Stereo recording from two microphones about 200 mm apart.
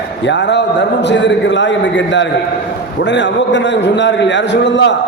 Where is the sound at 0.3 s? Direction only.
60° left (ahead or behind).